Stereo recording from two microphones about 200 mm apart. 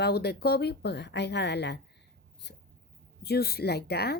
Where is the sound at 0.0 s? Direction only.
55° left (ahead or behind).